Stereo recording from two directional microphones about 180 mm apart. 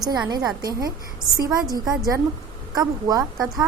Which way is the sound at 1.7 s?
20° right (ahead or behind).